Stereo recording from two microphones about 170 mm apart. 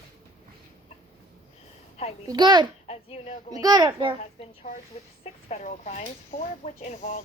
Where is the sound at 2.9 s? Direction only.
40° left (ahead or behind).